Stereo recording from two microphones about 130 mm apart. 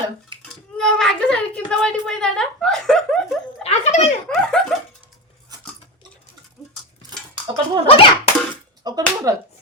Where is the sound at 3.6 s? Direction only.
55° left (ahead or behind).